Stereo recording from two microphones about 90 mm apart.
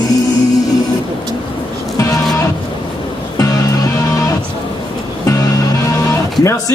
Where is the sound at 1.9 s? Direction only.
40° left (ahead or behind).